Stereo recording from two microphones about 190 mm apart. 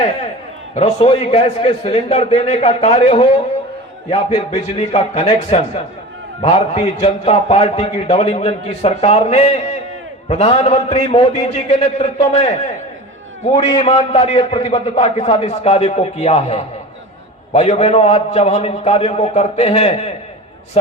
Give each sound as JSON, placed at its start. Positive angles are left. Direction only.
{"t": 0.8, "sound": "a man's voice", "side_deg": 35}